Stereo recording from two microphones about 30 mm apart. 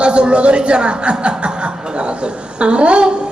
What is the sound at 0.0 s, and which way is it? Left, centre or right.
Speech, right.